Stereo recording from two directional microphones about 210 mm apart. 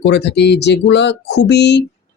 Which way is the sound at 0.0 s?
55° left (ahead or behind).